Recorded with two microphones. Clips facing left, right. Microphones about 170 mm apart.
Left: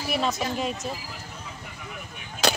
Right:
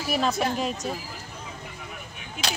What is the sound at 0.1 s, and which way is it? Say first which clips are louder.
Speech: right 1 dB; centre (ahead or behind).